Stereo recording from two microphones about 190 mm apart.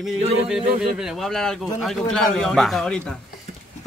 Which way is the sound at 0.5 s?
5° right (ahead or behind).